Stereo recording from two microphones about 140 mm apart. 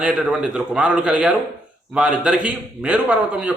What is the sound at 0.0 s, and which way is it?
A man's voice, 5° right (ahead or behind).